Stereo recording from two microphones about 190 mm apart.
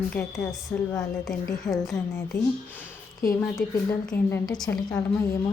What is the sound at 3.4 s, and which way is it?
A woman's voice, 15° left (ahead or behind).